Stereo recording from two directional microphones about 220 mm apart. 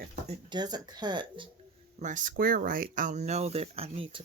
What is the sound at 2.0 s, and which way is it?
Speech, 35° right (ahead or behind).